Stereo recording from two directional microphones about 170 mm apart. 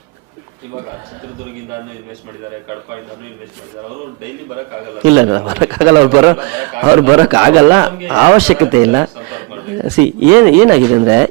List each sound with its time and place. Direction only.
5.0 s a man's voice: 15° right (ahead or behind)